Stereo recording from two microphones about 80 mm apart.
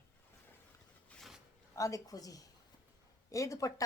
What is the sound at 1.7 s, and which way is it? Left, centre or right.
A woman's voice, left.